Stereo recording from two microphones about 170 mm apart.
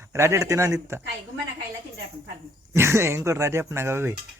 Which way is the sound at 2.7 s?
15° right (ahead or behind).